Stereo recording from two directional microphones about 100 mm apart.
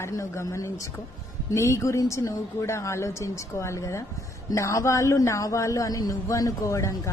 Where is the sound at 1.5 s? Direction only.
30° left (ahead or behind).